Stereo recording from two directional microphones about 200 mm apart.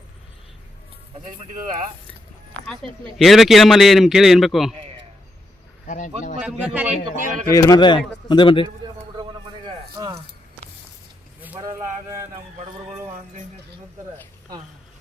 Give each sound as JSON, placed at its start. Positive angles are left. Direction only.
{"t": 3.2, "sound": "a man's voice", "side_deg": 0}
{"t": 5.9, "sound": "speech", "side_deg": 40}
{"t": 6.4, "sound": "a man's voice", "side_deg": -5}
{"t": 7.5, "sound": "speech", "side_deg": 20}
{"t": 8.8, "sound": "bird", "side_deg": -20}
{"t": 9.6, "sound": "a sound", "side_deg": -20}
{"t": 11.4, "sound": "a sound", "side_deg": -10}